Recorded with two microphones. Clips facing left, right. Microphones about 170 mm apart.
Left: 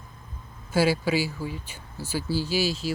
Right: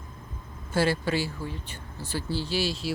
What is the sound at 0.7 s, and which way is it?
Speech, 5° left (ahead or behind).